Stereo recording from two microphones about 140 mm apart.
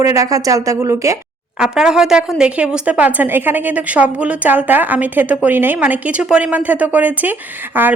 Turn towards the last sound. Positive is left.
turn(degrees=-15)  # may be behind; listen again after turning